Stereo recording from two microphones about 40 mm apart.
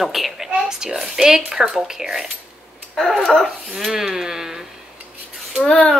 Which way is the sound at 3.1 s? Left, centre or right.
Centre.